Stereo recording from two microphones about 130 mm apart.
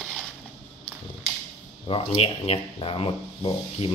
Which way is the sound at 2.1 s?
45° left (ahead or behind).